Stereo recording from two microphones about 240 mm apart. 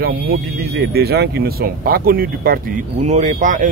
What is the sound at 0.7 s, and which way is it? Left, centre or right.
Speech, right.